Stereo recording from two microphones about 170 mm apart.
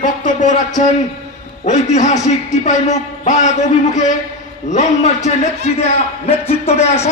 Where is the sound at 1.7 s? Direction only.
45° left (ahead or behind).